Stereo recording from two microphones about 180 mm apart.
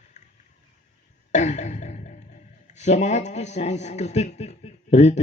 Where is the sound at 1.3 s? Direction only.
40° left (ahead or behind).